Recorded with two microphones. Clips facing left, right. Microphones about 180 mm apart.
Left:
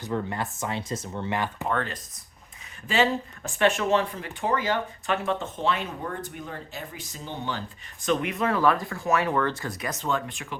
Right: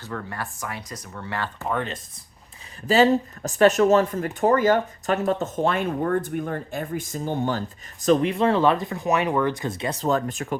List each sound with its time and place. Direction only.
0.0 s speech: 20° left (ahead or behind)
2.8 s speech: 40° right (ahead or behind)
8.0 s speech: 35° right (ahead or behind)